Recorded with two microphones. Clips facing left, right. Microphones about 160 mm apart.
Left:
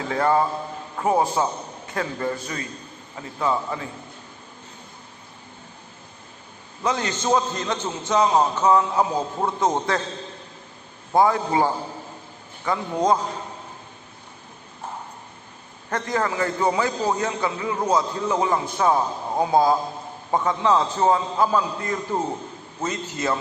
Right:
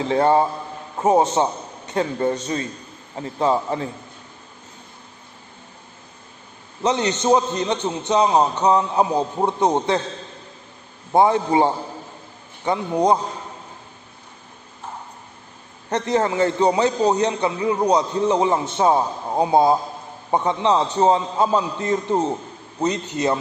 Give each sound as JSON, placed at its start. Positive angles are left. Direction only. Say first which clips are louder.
{"t": 0.1, "sound": "a man's voice", "louder": "right 3 dB", "side_deg": -30}
{"t": 6.8, "sound": "a man's voice", "louder": "right 4 dB", "side_deg": -20}
{"t": 11.1, "sound": "a man's voice", "louder": "right 3 dB", "side_deg": -25}
{"t": 15.9, "sound": "a man's voice", "louder": "right 4 dB", "side_deg": -25}